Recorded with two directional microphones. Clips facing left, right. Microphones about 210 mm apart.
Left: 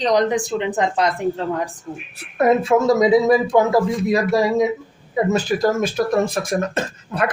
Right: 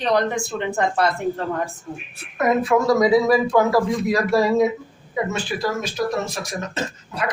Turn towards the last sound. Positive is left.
turn(degrees=55)  # may be behind; listen again after turning